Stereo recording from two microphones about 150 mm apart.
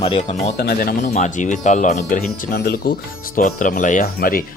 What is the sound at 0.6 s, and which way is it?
Speech, 90° left.